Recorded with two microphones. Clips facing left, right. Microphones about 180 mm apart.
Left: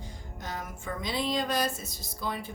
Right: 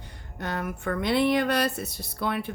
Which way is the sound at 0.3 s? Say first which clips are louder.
Right 8 dB; 65° right (ahead or behind).